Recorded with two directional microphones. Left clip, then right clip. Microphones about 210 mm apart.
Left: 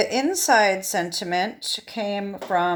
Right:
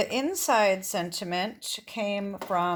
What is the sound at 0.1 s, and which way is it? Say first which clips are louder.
Speech: left 6 dB; 25° right (ahead or behind).